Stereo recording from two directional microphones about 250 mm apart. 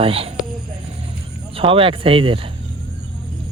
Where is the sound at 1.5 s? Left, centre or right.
Right.